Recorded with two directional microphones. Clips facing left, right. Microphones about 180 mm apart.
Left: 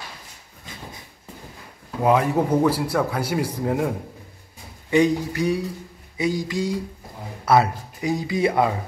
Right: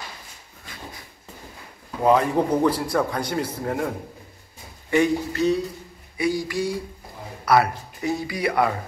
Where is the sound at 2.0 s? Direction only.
5° left (ahead or behind); by 8.8 s 20° left (ahead or behind).